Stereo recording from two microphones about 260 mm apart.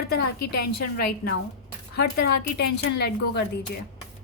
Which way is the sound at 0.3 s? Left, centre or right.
Left.